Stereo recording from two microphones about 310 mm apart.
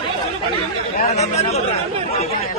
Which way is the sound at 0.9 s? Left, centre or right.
Left.